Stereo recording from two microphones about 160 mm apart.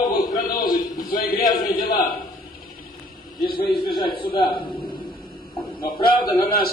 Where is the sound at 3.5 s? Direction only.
30° left (ahead or behind).